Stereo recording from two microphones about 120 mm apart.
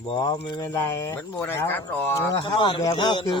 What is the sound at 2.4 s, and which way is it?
Speech, 40° left (ahead or behind).